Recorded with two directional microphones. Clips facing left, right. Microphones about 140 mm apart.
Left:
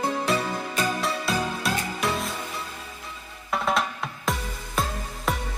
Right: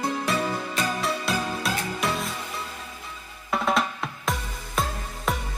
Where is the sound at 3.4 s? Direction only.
Centre (ahead or behind).